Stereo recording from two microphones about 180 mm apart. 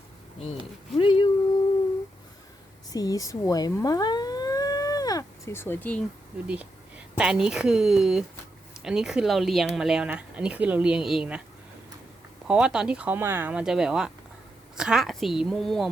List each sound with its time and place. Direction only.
0.9 s a sound: 30° left (ahead or behind)
2.9 s siren: 20° left (ahead or behind)
6.5 s speech: 5° right (ahead or behind)
12.5 s speech: 5° right (ahead or behind)